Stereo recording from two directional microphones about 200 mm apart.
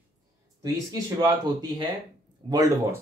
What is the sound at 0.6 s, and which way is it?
Speech, 20° right (ahead or behind).